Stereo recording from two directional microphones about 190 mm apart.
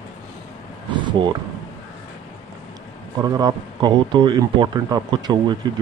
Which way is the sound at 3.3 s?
20° right (ahead or behind).